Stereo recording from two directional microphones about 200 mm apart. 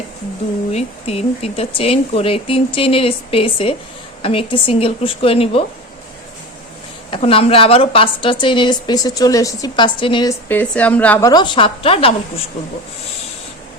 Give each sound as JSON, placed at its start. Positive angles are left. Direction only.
{"t": 0.7, "sound": "a woman's voice", "side_deg": 30}
{"t": 7.1, "sound": "a woman's voice", "side_deg": 30}
{"t": 10.5, "sound": "a woman's voice", "side_deg": 5}
{"t": 11.3, "sound": "a woman's voice", "side_deg": 20}